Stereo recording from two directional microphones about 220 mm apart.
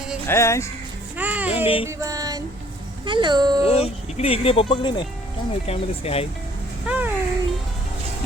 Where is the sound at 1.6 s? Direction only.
25° left (ahead or behind).